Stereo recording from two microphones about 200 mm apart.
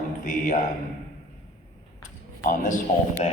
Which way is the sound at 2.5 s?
40° left (ahead or behind).